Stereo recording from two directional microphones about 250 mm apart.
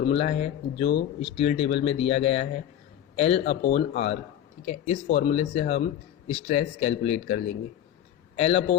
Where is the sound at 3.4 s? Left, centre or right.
Left.